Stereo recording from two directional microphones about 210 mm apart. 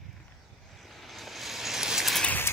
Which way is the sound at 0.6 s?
Centre (ahead or behind).